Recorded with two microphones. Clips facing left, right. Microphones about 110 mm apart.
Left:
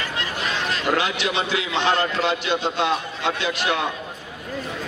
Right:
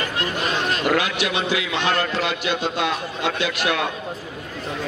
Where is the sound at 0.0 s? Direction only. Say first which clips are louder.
Right 3 dB; 50° right (ahead or behind).